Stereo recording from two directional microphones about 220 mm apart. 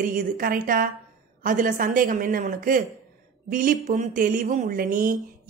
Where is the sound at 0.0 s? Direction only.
40° right (ahead or behind).